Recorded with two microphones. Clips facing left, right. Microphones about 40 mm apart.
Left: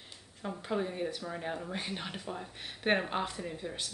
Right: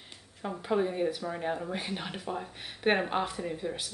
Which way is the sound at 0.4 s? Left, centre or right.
Centre.